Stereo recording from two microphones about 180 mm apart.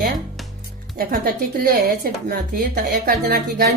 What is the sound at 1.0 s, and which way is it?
Speech, 55° right (ahead or behind).